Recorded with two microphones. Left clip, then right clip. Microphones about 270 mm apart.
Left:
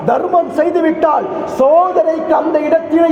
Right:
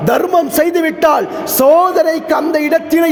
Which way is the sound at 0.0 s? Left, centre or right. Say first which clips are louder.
Right 1 dB; right.